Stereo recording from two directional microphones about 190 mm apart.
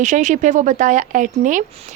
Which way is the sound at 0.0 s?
40° right (ahead or behind).